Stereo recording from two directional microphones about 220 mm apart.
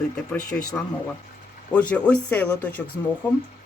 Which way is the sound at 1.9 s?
5° left (ahead or behind).